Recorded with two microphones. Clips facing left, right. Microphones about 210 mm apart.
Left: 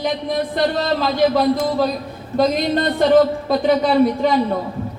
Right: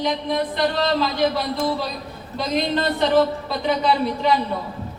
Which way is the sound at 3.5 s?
50° left (ahead or behind).